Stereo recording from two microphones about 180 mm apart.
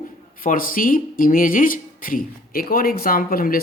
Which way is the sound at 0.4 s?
50° left (ahead or behind).